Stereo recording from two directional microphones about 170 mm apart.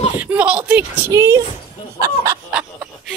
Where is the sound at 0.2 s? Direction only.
10° right (ahead or behind).